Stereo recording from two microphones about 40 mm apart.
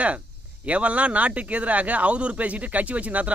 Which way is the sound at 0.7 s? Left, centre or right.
Right.